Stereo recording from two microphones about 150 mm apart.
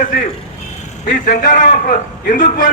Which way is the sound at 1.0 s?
75° left (ahead or behind).